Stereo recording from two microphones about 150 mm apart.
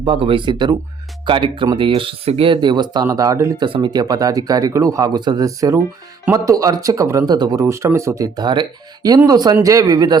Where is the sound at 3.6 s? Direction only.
30° right (ahead or behind).